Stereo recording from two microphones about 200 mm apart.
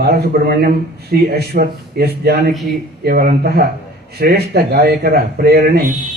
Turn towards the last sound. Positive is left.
turn(degrees=-50)  # may be behind; listen again after turning